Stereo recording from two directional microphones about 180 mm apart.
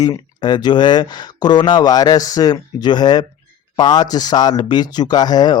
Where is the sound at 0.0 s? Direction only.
20° left (ahead or behind).